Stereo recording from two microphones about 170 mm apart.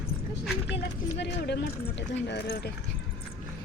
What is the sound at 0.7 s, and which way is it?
Speech, 85° left.